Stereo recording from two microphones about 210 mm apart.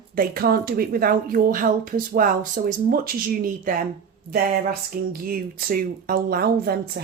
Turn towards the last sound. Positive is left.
turn(degrees=-45)  # may be behind; listen again after turning